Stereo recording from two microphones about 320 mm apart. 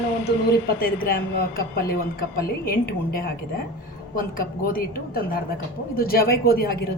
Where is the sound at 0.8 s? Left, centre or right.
Left.